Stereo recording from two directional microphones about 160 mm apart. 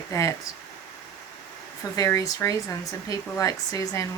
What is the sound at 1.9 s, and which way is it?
Speech, 20° left (ahead or behind).